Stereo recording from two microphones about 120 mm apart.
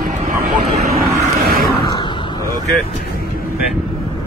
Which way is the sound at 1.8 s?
40° left (ahead or behind).